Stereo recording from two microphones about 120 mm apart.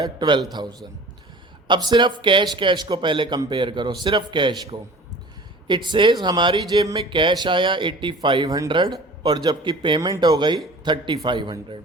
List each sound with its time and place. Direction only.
0.0 s speech: 40° right (ahead or behind)
8.4 s speech: 30° right (ahead or behind)